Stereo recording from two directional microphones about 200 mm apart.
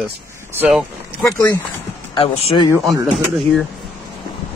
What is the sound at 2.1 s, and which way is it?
Speech, 25° left (ahead or behind).